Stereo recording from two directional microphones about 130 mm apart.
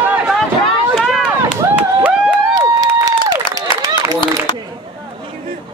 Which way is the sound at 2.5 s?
30° right (ahead or behind).